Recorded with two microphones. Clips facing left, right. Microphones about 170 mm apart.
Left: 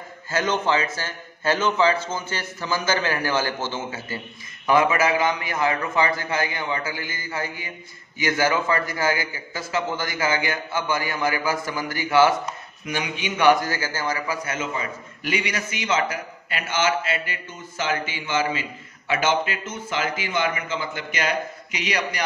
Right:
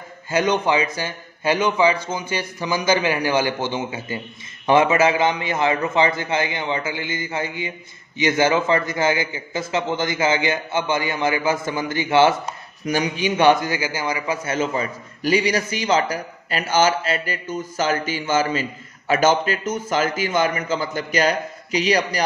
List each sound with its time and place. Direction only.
0.3 s a man's voice: 15° right (ahead or behind)
12.8 s a man's voice: 40° right (ahead or behind)
13.2 s a man's voice: 25° right (ahead or behind)